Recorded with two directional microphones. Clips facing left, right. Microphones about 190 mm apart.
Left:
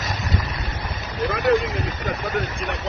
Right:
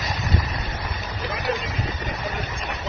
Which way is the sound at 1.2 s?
65° left (ahead or behind).